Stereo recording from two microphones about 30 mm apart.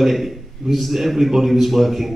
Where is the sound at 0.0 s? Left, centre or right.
Centre.